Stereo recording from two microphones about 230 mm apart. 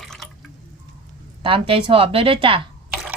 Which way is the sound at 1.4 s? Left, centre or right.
Right.